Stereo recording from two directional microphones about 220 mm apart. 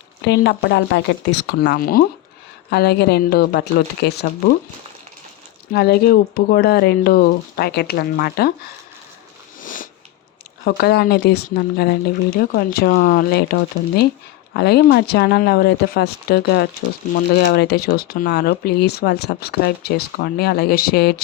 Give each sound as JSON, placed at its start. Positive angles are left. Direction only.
{"t": 0.3, "sound": "speech", "side_deg": 50}
{"t": 5.7, "sound": "speech", "side_deg": 45}
{"t": 9.6, "sound": "biting", "side_deg": 40}
{"t": 10.7, "sound": "speech", "side_deg": 45}